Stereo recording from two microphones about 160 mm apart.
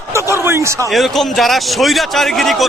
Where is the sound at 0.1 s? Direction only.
15° right (ahead or behind).